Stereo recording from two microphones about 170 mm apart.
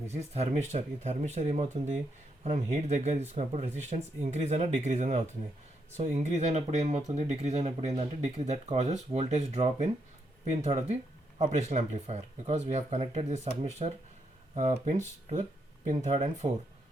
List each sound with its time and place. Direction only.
0.1 s speech: 40° right (ahead or behind)